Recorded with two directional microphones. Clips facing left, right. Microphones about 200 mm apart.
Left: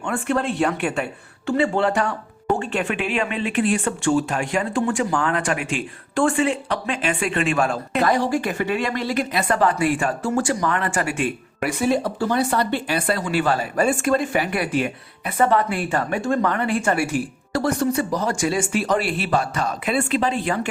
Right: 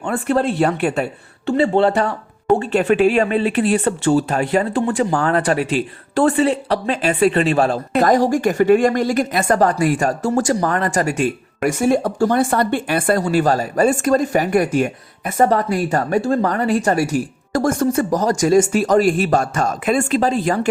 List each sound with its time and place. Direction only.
0.0 s speech: 35° right (ahead or behind)